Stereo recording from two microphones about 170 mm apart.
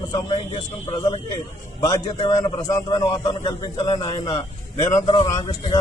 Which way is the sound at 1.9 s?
25° left (ahead or behind).